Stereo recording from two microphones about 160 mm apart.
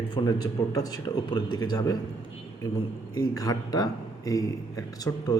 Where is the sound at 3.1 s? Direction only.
20° left (ahead or behind).